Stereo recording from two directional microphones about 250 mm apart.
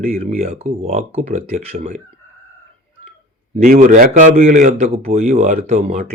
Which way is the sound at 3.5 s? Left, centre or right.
Right.